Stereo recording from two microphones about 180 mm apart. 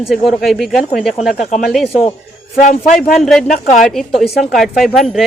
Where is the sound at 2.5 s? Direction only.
50° left (ahead or behind).